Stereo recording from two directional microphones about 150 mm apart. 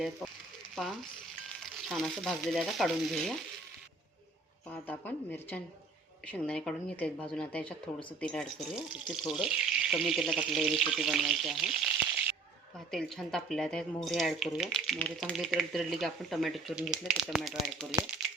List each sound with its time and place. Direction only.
0.8 s speech: 5° left (ahead or behind)
4.7 s speech: 10° left (ahead or behind)
12.9 s speech: 5° left (ahead or behind)